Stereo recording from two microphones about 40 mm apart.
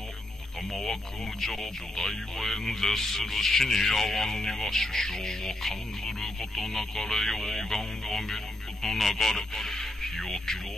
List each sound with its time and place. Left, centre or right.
1.4 s speech: centre